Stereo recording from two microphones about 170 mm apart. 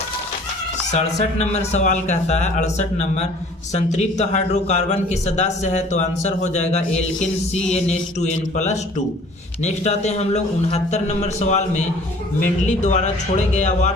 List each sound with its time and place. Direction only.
0.9 s a man's voice: 40° left (ahead or behind)